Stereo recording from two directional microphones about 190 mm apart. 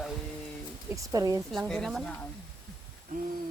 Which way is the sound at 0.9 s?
15° right (ahead or behind).